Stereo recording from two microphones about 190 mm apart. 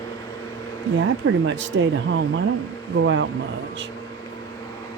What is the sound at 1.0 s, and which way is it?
Speech, 75° right (ahead or behind).